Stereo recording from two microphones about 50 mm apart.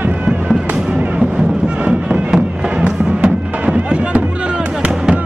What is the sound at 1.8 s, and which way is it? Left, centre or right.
Music, right.